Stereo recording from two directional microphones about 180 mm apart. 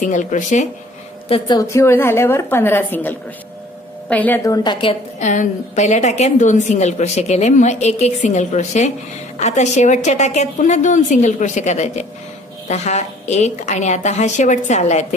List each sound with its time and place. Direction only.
0.1 s speech: 45° left (ahead or behind)
1.3 s a woman's voice: 20° left (ahead or behind)
4.6 s a woman's voice: 30° left (ahead or behind)
5.2 s a woman's voice: 45° left (ahead or behind)